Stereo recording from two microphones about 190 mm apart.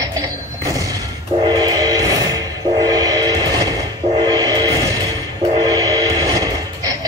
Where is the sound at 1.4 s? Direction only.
20° right (ahead or behind).